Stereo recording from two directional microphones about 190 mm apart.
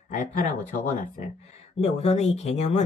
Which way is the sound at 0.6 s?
40° left (ahead or behind).